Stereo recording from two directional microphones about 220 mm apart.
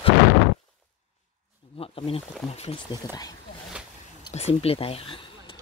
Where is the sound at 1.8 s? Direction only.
25° left (ahead or behind).